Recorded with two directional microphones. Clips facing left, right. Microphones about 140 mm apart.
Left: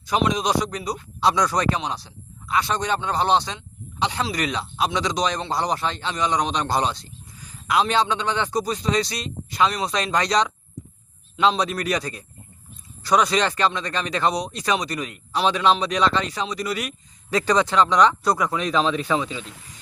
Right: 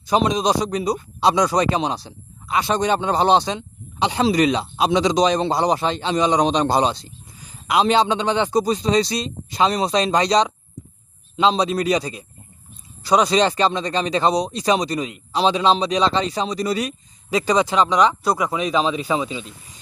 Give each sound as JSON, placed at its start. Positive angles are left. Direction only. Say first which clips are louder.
{"t": 0.1, "sound": "speech", "louder": "right 3 dB", "side_deg": -30}
{"t": 13.1, "sound": "speech", "louder": "right 3 dB", "side_deg": -30}
{"t": 17.3, "sound": "speech", "louder": "right 1 dB", "side_deg": -10}